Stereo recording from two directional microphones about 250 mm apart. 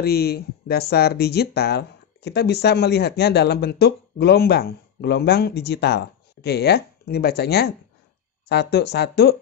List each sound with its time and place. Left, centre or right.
0.0 s speech: left